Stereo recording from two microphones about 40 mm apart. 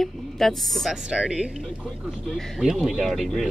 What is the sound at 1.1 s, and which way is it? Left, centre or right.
Speech, centre.